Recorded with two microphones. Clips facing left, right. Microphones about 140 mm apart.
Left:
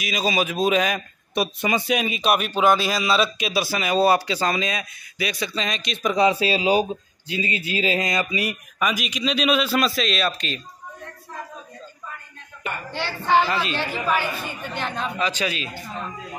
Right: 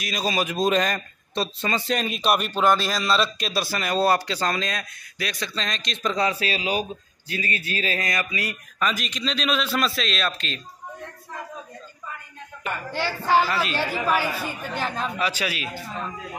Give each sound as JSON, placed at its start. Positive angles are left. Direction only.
{"t": 0.0, "sound": "a man's voice", "side_deg": 5}
{"t": 6.1, "sound": "a man's voice", "side_deg": 25}
{"t": 8.7, "sound": "a man's voice", "side_deg": 10}
{"t": 12.9, "sound": "a man's voice", "side_deg": -10}